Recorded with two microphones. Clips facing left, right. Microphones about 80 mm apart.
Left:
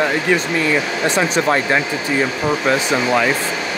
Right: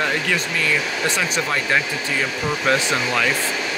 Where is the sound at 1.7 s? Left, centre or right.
Left.